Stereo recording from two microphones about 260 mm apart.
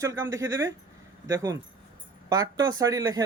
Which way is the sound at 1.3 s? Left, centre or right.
Centre.